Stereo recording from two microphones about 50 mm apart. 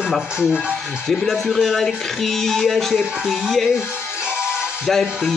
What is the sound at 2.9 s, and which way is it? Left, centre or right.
Speech, centre.